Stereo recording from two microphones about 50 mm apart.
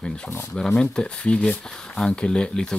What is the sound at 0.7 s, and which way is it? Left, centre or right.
Speech, centre.